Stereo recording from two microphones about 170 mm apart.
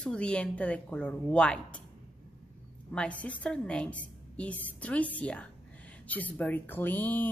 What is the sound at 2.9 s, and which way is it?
A woman's voice, 5° left (ahead or behind).